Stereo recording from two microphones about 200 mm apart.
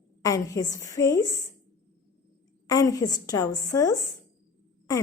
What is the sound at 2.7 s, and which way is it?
A woman's voice, 15° left (ahead or behind).